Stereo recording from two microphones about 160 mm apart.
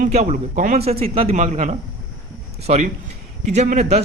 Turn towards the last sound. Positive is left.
turn(degrees=-45)  # may be behind; listen again after turning